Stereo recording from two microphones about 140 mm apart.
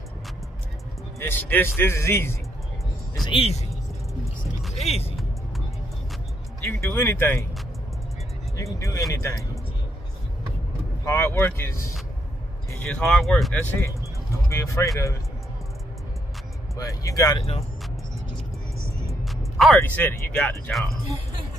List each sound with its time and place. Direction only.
1.2 s speech: 15° left (ahead or behind)
3.3 s speech: 45° left (ahead or behind)
4.7 s speech: 45° left (ahead or behind)
6.6 s speech: 20° left (ahead or behind)
8.7 s speech: 25° left (ahead or behind)
11.1 s speech: 15° left (ahead or behind)
12.7 s speech: 5° left (ahead or behind)
14.5 s speech: 20° left (ahead or behind)
16.7 s speech: 25° left (ahead or behind)
17.4 s speech: 45° left (ahead or behind)
19.2 s music: centre (ahead or behind)
19.8 s speech: 15° left (ahead or behind)